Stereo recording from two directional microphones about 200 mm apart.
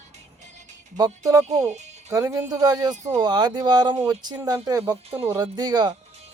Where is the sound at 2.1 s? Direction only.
15° right (ahead or behind).